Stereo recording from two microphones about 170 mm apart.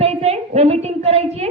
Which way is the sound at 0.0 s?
40° right (ahead or behind).